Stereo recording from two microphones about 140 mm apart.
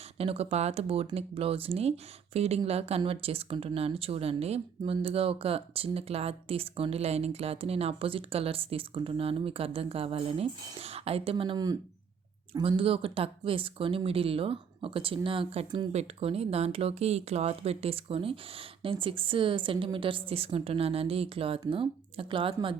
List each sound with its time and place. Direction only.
0.2 s speech: 45° right (ahead or behind); by 11.8 s 30° right (ahead or behind)
12.5 s speech: 40° right (ahead or behind)
15.9 s speech: 50° right (ahead or behind)